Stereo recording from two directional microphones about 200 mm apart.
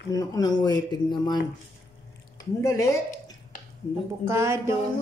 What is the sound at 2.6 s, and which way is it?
Speech, 15° left (ahead or behind).